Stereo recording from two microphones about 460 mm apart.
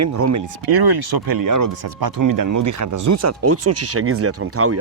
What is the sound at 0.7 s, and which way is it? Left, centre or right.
Speech, right.